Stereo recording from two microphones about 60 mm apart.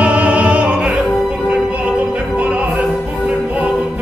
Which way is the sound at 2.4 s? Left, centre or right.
Right.